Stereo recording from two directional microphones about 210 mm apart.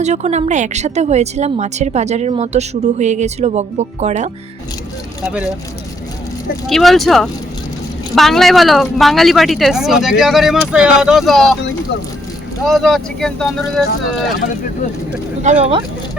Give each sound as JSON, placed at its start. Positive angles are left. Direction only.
{"t": 0.0, "sound": "speech", "side_deg": -30}
{"t": 5.2, "sound": "speech", "side_deg": -5}
{"t": 6.7, "sound": "speech", "side_deg": 0}
{"t": 12.6, "sound": "speech", "side_deg": 0}
{"t": 15.4, "sound": "speech", "side_deg": -30}